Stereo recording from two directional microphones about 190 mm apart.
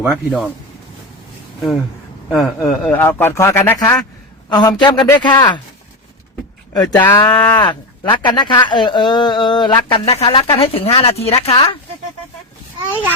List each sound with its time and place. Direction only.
0.0 s speech: 5° right (ahead or behind)
2.3 s a man's voice: centre (ahead or behind); by 5.5 s 20° left (ahead or behind)
6.7 s a man's voice: 15° left (ahead or behind)
8.1 s speech: 25° left (ahead or behind)